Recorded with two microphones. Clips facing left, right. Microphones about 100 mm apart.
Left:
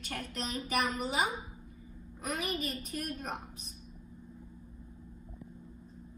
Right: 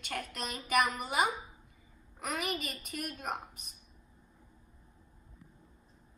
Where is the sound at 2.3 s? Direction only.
70° right (ahead or behind).